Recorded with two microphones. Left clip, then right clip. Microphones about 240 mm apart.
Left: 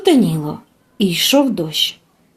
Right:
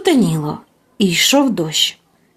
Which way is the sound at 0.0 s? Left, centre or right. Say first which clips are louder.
Left 1 dB; right.